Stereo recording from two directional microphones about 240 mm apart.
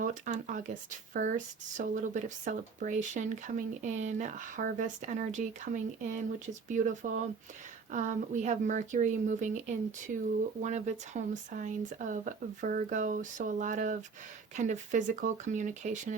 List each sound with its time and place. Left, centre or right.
0.0 s speech: right